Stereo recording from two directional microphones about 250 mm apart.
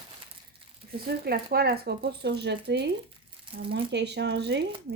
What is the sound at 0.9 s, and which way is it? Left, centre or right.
Speech, right.